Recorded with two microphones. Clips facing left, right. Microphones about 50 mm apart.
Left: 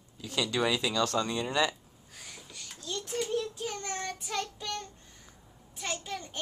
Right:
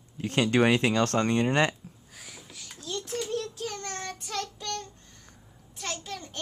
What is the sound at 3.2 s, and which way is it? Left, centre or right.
Child singing, centre.